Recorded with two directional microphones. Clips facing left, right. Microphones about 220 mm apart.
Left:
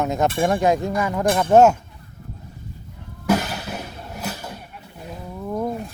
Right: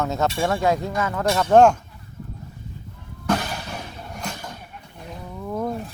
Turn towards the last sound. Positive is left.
turn(degrees=5)  # may be behind; listen again after turning